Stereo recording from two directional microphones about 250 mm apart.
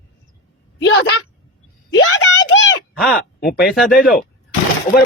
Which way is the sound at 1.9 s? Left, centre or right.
Left.